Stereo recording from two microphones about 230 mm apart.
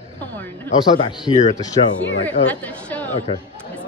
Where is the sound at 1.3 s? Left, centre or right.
Left.